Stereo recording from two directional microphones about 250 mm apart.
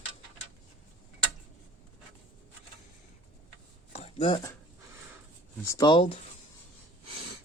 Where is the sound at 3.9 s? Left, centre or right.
Left.